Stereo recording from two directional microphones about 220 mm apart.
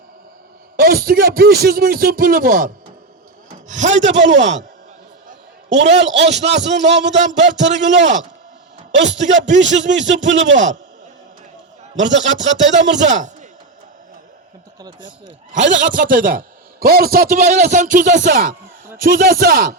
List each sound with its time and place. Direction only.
0.8 s speech: 40° right (ahead or behind)
3.7 s a man's voice: 35° right (ahead or behind)
4.1 s a man's voice: 55° right (ahead or behind)
5.7 s a man's voice: 50° right (ahead or behind)
6.9 s speech: 30° right (ahead or behind)
7.3 s a man's voice: 55° right (ahead or behind)
11.9 s a man's voice: 55° right (ahead or behind)
14.8 s speech: 20° right (ahead or behind)
15.7 s speech: 35° right (ahead or behind)